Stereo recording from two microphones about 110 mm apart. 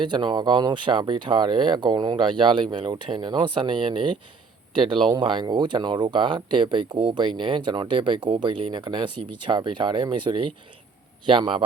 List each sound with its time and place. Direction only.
0.0 s speech: 45° right (ahead or behind)